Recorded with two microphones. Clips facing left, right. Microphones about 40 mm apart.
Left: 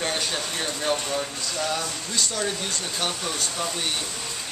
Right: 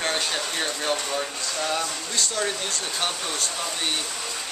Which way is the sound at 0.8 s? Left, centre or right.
Centre.